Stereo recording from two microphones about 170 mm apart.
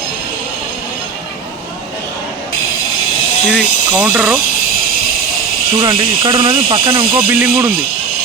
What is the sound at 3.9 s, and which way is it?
Speech, 10° right (ahead or behind).